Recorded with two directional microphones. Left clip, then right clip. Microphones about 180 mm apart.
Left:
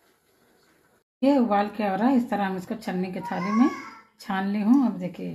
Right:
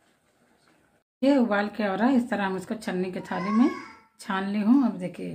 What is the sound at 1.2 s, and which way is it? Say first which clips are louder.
A woman's voice: left 1 dB; 30° right (ahead or behind).